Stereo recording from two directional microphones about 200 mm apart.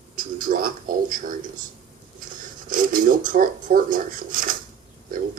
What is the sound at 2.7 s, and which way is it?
Speech, 45° right (ahead or behind).